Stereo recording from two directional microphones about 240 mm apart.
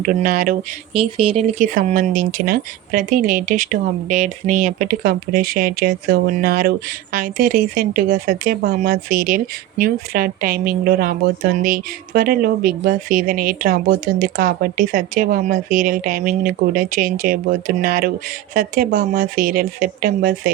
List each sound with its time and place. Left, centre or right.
0.0 s speech: right
0.9 s speech: right